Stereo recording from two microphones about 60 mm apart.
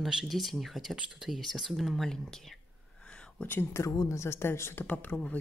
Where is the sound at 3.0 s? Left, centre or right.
Centre.